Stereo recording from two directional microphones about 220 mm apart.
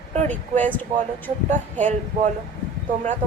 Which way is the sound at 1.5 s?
35° right (ahead or behind).